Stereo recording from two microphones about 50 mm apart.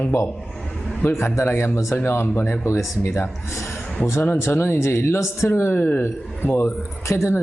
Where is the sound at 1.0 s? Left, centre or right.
Left.